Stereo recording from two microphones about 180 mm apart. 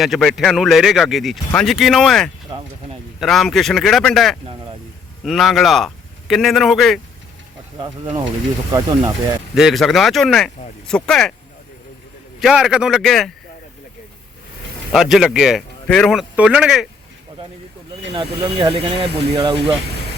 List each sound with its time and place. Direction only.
0.0 s speech: centre (ahead or behind)
8.7 s speech: 20° right (ahead or behind)
9.6 s speech: centre (ahead or behind)
12.4 s speech: centre (ahead or behind)
14.9 s speech: centre (ahead or behind)
18.1 s speech: 30° right (ahead or behind)